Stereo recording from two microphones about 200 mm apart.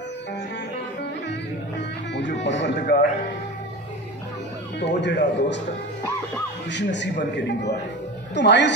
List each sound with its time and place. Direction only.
1.8 s speech: 60° left (ahead or behind)
4.7 s speech: 60° left (ahead or behind)
6.7 s speech: 60° left (ahead or behind)